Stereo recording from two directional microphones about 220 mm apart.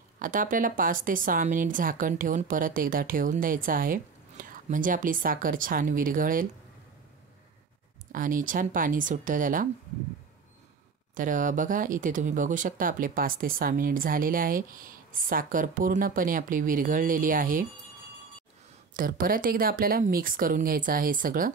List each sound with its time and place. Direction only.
0.2 s a woman's voice: 40° right (ahead or behind)
8.1 s a woman's voice: 35° right (ahead or behind)
11.1 s a woman's voice: 35° right (ahead or behind)
18.9 s a woman's voice: 40° right (ahead or behind)